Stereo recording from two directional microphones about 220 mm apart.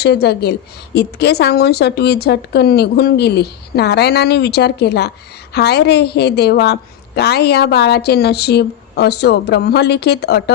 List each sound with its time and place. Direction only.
0.0 s a woman's voice: 50° left (ahead or behind)